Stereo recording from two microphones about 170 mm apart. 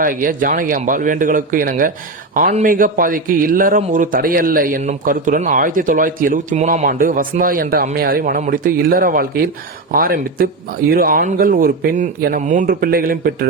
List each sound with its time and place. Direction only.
0.0 s a man's voice: 55° right (ahead or behind)